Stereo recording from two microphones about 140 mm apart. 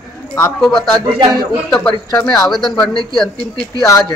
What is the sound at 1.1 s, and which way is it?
Speech, 35° right (ahead or behind).